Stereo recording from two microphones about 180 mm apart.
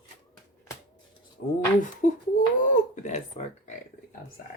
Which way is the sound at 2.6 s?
45° left (ahead or behind).